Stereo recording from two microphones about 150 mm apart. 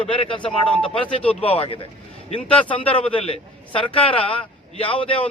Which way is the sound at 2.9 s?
40° left (ahead or behind).